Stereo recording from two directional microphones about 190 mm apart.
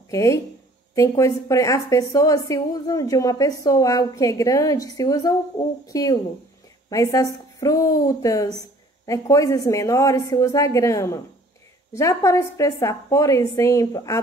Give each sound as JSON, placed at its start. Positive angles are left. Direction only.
{"t": 0.1, "sound": "a woman's voice", "side_deg": 15}